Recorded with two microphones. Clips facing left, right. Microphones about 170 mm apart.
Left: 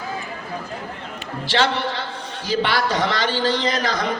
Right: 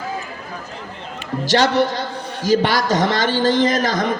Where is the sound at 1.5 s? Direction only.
40° right (ahead or behind).